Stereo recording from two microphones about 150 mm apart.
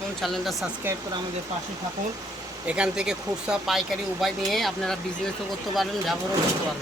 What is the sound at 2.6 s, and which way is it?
Speech, 5° right (ahead or behind).